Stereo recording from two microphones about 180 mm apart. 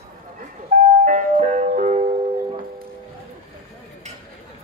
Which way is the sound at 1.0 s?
45° right (ahead or behind).